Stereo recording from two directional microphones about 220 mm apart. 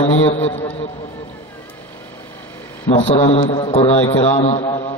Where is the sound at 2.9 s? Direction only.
20° left (ahead or behind).